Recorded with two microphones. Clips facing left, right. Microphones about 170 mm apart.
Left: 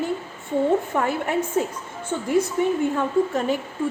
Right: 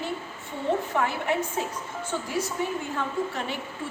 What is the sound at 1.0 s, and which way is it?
Speech, 45° left (ahead or behind).